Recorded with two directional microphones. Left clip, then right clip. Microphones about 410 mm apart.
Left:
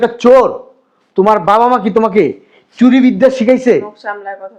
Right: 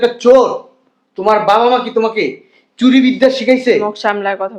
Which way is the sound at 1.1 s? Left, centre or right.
Left.